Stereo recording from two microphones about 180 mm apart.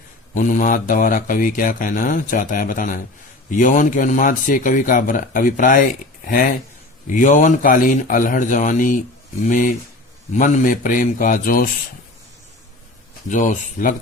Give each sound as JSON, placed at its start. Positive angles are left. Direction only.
{"t": 0.3, "sound": "speech", "side_deg": 45}
{"t": 13.2, "sound": "speech", "side_deg": 45}